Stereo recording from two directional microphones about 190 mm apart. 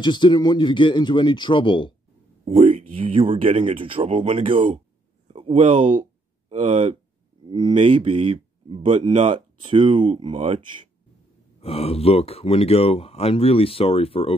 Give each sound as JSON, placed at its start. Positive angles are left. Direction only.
{"t": 0.0, "sound": "speech", "side_deg": 25}
{"t": 2.4, "sound": "speech", "side_deg": -30}
{"t": 11.6, "sound": "speech", "side_deg": 30}